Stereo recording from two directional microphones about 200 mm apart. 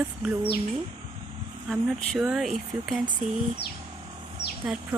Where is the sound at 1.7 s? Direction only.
Centre (ahead or behind).